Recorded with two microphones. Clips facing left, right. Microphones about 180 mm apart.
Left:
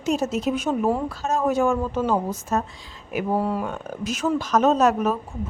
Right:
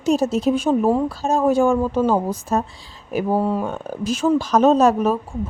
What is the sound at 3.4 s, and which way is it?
Speech, 25° right (ahead or behind).